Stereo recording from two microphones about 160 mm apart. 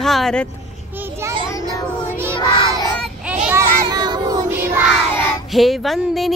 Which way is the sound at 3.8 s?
25° right (ahead or behind).